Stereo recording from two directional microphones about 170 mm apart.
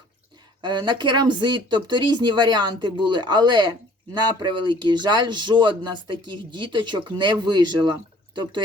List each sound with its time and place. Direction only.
0.6 s speech: 25° right (ahead or behind)